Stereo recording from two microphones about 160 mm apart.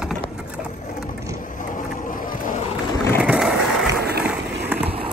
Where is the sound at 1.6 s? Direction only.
55° left (ahead or behind).